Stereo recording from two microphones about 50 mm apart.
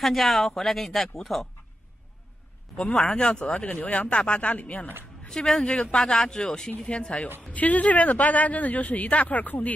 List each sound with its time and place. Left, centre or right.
0.0 s speech: centre
3.0 s a man's voice: centre; by 4.9 s left
5.3 s speech: centre
5.7 s a man's voice: left
5.9 s a man's voice: centre; by 9.7 s left